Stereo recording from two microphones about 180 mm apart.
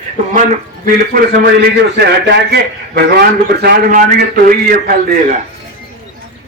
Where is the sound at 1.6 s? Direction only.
65° right (ahead or behind).